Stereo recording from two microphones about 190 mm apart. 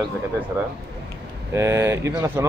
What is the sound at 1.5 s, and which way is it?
Speech, 15° right (ahead or behind).